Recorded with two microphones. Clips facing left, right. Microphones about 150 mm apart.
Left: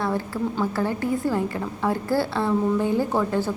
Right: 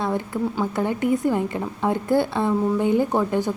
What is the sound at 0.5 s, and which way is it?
A woman's voice, 20° right (ahead or behind).